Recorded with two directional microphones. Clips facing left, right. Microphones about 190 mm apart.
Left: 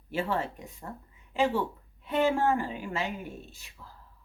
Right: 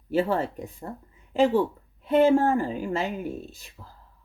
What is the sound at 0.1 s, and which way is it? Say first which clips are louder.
Speech: right 6 dB; 45° right (ahead or behind).